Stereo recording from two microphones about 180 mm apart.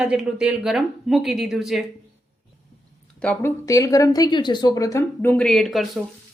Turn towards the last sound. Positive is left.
turn(degrees=0)  # may be behind; listen again after turning